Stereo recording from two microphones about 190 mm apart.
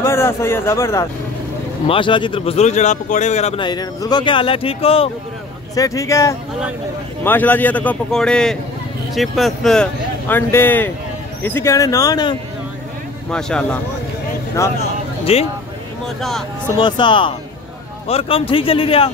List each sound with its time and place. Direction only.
0.0 s a man's voice: 15° left (ahead or behind)
1.9 s speech: 25° left (ahead or behind)
5.8 s a man's voice: 15° left (ahead or behind)
13.3 s speech: 5° left (ahead or behind)
14.6 s a man's voice: 15° left (ahead or behind)
15.3 s speech: 30° left (ahead or behind)
16.2 s speech: centre (ahead or behind)
16.7 s speech: 25° left (ahead or behind)